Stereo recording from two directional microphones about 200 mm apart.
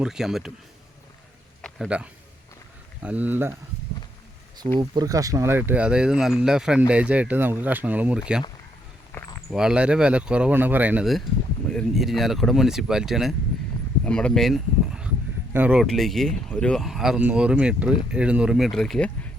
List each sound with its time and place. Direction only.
0.0 s speech: centre (ahead or behind)
1.6 s a sound: 5° right (ahead or behind)
3.0 s speech: 5° right (ahead or behind)
4.8 s speech: 20° right (ahead or behind)
9.1 s a sound: 10° left (ahead or behind)
9.5 s speech: 5° right (ahead or behind)